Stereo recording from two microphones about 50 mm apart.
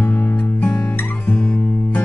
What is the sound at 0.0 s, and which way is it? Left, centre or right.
Music, left.